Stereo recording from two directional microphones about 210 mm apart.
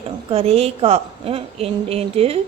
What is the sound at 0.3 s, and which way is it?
Speech, 30° right (ahead or behind).